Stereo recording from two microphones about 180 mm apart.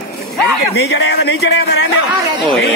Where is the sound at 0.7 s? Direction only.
70° left (ahead or behind).